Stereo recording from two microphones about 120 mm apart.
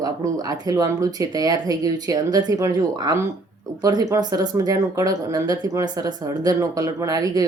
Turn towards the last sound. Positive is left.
turn(degrees=-30)  # may be behind; listen again after turning